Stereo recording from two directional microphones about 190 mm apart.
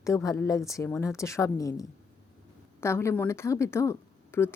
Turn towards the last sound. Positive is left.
turn(degrees=10)  # may be behind; listen again after turning